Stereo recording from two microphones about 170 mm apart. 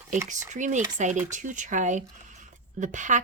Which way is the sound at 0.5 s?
45° right (ahead or behind).